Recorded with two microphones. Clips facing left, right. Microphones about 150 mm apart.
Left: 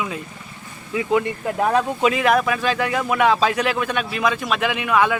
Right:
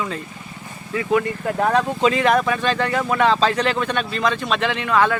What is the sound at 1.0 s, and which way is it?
Speech, 20° left (ahead or behind).